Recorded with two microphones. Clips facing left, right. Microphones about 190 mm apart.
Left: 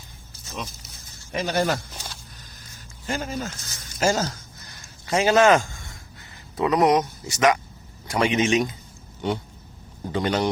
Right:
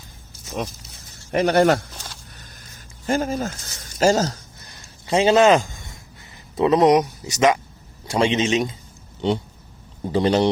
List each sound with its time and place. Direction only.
1.3 s speech: 60° right (ahead or behind)
3.1 s speech: 45° right (ahead or behind)
3.9 s a sound: 35° right (ahead or behind); by 6.0 s 20° right (ahead or behind)
6.6 s speech: 25° right (ahead or behind)